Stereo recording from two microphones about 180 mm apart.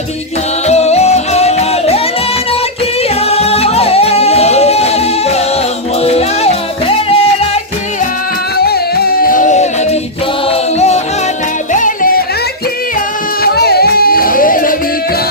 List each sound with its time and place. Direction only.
0.7 s music: 35° left (ahead or behind)
3.0 s music: 35° left (ahead or behind)
8.5 s music: 60° left (ahead or behind)
13.4 s music: 60° left (ahead or behind)